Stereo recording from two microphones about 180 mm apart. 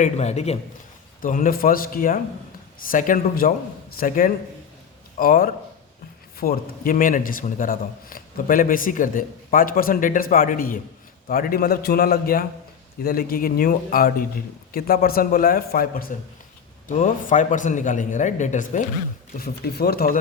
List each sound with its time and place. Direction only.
0.0 s a man's voice: 40° left (ahead or behind)
1.2 s a man's voice: 50° left (ahead or behind)
19.4 s speech: 60° left (ahead or behind)